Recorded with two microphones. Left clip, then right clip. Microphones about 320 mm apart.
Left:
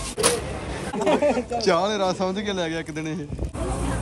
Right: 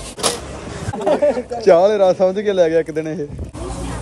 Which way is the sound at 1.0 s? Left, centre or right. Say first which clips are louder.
Right 5 dB; left.